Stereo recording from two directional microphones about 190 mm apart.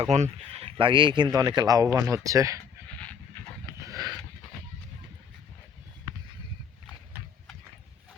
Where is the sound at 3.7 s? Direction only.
15° right (ahead or behind).